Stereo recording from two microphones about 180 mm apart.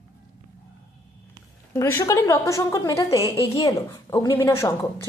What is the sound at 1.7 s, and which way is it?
A woman's voice, 15° left (ahead or behind).